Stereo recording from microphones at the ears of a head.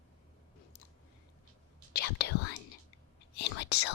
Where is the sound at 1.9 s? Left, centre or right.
Left.